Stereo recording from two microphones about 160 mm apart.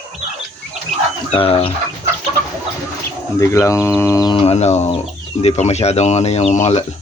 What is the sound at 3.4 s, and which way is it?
Speech, 20° left (ahead or behind).